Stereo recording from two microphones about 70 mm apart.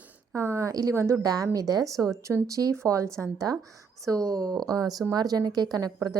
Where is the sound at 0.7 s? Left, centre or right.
Right.